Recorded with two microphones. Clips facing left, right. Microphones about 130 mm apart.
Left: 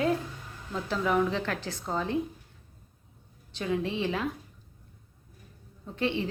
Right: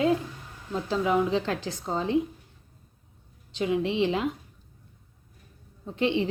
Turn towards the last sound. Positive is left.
turn(degrees=-20)  # may be behind; listen again after turning